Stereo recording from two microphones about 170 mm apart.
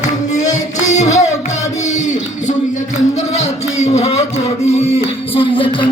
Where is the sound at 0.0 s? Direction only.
45° left (ahead or behind).